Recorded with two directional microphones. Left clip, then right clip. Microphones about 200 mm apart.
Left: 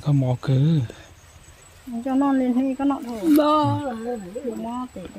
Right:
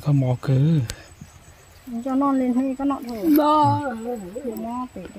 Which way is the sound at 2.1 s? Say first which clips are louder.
Even; 30° right (ahead or behind).